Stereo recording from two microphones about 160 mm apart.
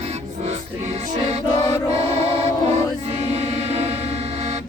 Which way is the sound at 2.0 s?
40° right (ahead or behind).